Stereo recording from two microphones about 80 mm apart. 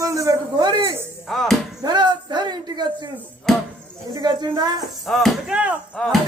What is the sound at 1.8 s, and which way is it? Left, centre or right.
A man's voice, right.